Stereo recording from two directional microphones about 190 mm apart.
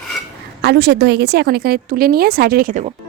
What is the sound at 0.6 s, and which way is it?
A woman's voice, 60° right (ahead or behind).